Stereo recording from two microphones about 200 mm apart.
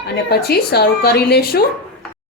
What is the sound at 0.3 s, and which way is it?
Speech, 55° left (ahead or behind).